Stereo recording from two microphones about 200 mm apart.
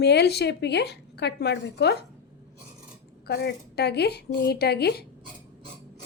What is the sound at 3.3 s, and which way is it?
A woman's voice, 55° left (ahead or behind).